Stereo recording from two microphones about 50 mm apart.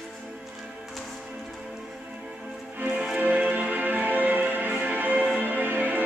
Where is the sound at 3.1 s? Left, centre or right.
Right.